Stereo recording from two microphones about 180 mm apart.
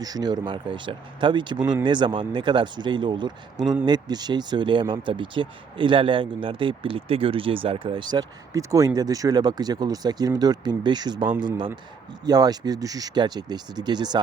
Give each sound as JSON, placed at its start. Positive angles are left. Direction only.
{"t": 0.0, "sound": "speech", "side_deg": -20}